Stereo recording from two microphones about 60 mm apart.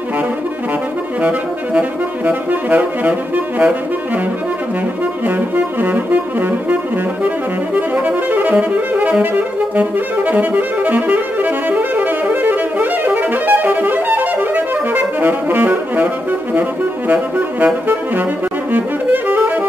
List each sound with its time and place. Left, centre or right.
1.2 s saxophone: right
5.8 s saxophone: right
7.9 s saxophone: right
18.7 s saxophone: right